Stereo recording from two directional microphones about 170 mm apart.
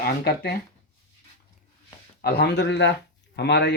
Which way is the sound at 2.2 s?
70° left (ahead or behind).